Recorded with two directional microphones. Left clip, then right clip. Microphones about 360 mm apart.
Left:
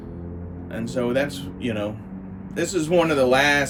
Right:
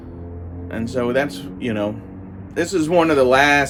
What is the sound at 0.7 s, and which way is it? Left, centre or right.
A man's voice, centre.